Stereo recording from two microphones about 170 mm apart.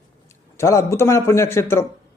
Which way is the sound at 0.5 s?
20° left (ahead or behind).